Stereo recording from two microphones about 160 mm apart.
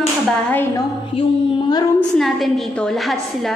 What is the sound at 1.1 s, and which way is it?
Music, 25° left (ahead or behind).